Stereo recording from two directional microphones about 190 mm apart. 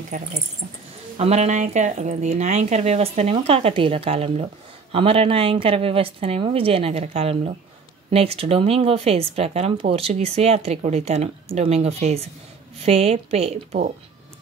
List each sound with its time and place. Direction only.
0.1 s a woman's voice: 40° right (ahead or behind)